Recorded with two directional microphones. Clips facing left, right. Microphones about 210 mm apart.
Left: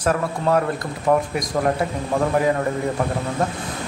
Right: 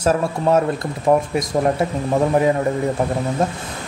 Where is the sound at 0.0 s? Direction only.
25° right (ahead or behind).